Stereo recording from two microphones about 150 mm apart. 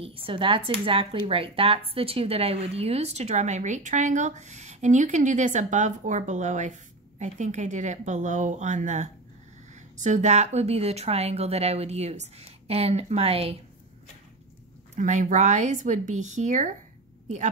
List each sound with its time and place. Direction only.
0.0 s speech: 40° right (ahead or behind)
15.0 s speech: 55° right (ahead or behind)